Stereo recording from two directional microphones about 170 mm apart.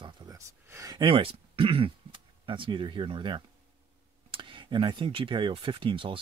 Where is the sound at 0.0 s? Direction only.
25° right (ahead or behind).